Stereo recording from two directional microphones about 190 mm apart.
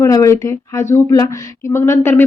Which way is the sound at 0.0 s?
15° left (ahead or behind).